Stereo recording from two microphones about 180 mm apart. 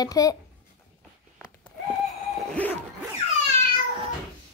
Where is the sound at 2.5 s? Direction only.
10° left (ahead or behind).